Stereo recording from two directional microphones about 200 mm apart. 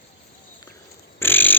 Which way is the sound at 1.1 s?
10° left (ahead or behind).